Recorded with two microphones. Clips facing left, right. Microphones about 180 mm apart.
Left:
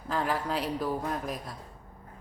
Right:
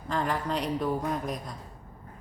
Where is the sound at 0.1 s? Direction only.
5° left (ahead or behind).